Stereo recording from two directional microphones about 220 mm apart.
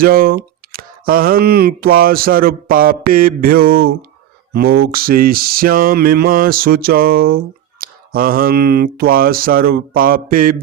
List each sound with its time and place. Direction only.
0.0 s mantra: 40° right (ahead or behind)